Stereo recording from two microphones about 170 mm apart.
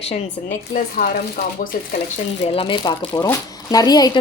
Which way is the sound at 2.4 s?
35° left (ahead or behind).